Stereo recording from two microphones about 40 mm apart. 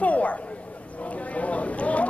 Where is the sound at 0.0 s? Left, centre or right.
Left.